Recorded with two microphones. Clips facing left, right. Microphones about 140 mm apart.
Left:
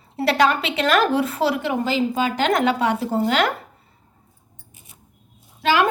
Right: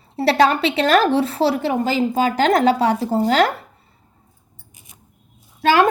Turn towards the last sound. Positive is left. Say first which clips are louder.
# right 4 dB
turn(degrees=-45)  # may be behind; listen again after turning